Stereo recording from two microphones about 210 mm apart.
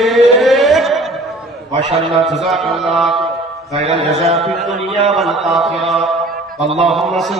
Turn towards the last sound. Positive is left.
turn(degrees=0)  # may be behind; listen again after turning